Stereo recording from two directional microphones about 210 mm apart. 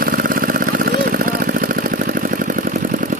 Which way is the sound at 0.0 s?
45° right (ahead or behind).